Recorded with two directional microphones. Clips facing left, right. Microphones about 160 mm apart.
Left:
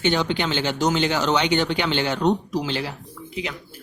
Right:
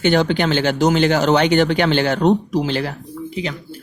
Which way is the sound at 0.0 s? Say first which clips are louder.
Right 6 dB; 50° right (ahead or behind).